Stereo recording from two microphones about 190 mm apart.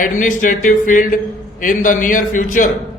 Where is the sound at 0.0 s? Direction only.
45° left (ahead or behind).